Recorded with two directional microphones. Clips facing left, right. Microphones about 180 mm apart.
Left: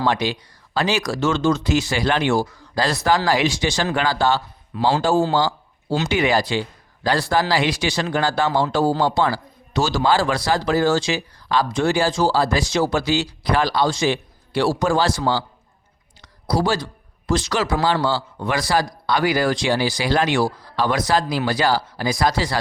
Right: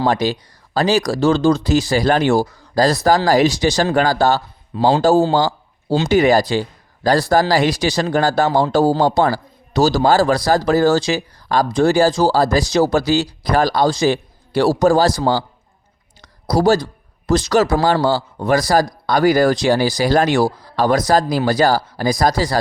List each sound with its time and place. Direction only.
0.0 s a man's voice: 40° right (ahead or behind)